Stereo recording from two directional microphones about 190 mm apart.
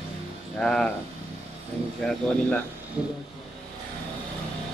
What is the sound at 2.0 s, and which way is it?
Speech, 5° left (ahead or behind).